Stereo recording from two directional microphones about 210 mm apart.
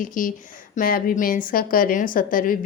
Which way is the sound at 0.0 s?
40° left (ahead or behind).